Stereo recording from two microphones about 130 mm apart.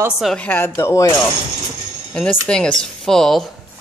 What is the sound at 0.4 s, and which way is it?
Speech, 15° left (ahead or behind).